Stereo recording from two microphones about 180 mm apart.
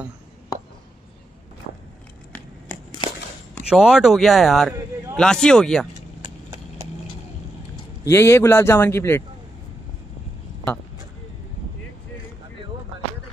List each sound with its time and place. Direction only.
3.6 s speech: 5° right (ahead or behind)
6.2 s clip-clop: 25° right (ahead or behind)
8.1 s a man's voice: 15° left (ahead or behind)